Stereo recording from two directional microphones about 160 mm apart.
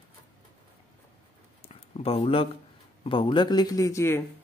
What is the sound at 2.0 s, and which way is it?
Speech, 35° left (ahead or behind).